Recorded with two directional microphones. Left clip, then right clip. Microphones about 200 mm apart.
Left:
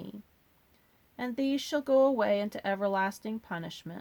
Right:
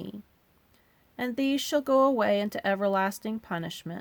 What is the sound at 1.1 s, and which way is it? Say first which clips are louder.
Speech: right 3 dB; 35° right (ahead or behind).